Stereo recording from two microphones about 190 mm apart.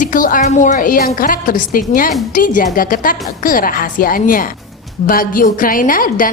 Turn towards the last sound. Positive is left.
turn(degrees=45)  # may be behind; listen again after turning